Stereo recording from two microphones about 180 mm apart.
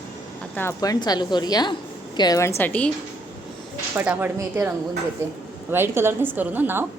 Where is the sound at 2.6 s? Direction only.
10° left (ahead or behind).